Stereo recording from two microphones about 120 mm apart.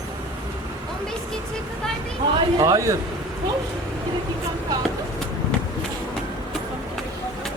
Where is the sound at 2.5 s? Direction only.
30° right (ahead or behind).